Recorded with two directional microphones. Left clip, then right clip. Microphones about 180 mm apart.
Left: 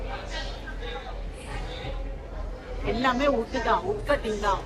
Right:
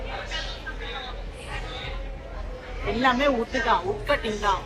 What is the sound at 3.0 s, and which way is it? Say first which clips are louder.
Speech: right 2 dB; 40° right (ahead or behind).